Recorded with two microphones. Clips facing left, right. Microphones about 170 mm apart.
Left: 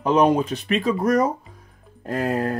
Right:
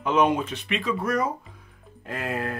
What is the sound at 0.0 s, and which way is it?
Speech, 35° left (ahead or behind).